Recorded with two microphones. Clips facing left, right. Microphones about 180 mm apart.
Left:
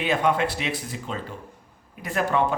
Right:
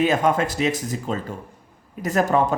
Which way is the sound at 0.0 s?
45° right (ahead or behind).